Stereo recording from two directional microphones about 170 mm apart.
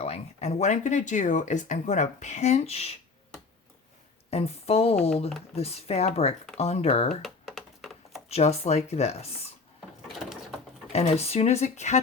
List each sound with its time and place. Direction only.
0.0 s speech: 40° left (ahead or behind)
4.3 s speech: 40° left (ahead or behind)
7.2 s a sound: centre (ahead or behind)
8.3 s speech: 40° left (ahead or behind)
10.9 s speech: 35° left (ahead or behind)